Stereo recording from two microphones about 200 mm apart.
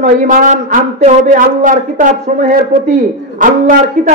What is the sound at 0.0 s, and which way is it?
Speech, 40° right (ahead or behind).